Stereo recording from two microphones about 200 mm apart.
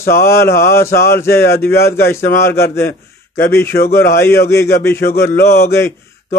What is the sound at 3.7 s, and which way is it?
Speech, 50° left (ahead or behind).